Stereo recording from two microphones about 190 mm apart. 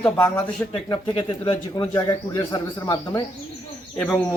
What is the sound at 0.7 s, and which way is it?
Speech, 25° left (ahead or behind).